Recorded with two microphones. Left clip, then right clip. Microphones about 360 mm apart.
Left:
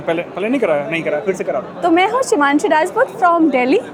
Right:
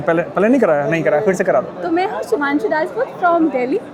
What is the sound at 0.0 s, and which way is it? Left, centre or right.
A man's voice, right.